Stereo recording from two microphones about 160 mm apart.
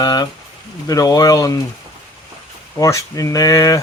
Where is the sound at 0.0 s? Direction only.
25° left (ahead or behind).